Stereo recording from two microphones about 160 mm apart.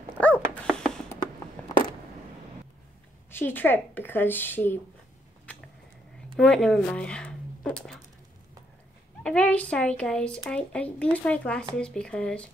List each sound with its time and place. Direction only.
0.2 s dog: 5° left (ahead or behind)
1.6 s a sound: 10° left (ahead or behind)
3.3 s speech: 15° left (ahead or behind)
6.3 s speech: 5° left (ahead or behind)
9.2 s speech: 5° left (ahead or behind)